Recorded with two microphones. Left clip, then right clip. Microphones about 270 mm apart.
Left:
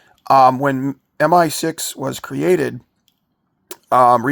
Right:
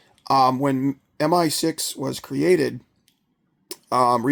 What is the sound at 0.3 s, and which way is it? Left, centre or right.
Speech, centre.